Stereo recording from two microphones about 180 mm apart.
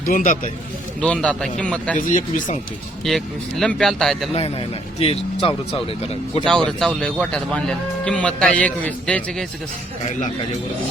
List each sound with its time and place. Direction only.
0.0 s speech: 50° left (ahead or behind)
1.0 s a man's voice: 5° left (ahead or behind)
2.0 s speech: 45° left (ahead or behind)
3.0 s speech: centre (ahead or behind)
4.9 s speech: 30° left (ahead or behind)
6.7 s speech: centre (ahead or behind)